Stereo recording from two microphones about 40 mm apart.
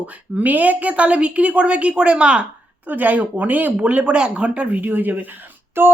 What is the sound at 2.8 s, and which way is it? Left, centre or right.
Speech, right.